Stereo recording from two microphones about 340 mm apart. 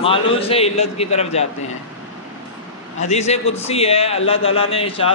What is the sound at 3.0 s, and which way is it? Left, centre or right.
A man's voice, centre.